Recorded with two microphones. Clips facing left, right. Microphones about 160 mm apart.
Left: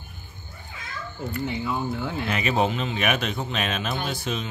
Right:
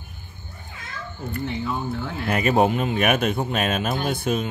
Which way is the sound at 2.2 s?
50° right (ahead or behind).